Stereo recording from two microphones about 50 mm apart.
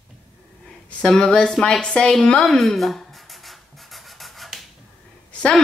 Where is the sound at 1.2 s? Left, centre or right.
Centre.